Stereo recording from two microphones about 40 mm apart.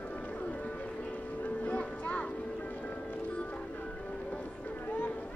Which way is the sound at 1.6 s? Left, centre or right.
Left.